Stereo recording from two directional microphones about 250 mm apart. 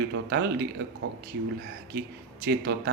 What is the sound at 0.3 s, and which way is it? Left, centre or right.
Speech, right.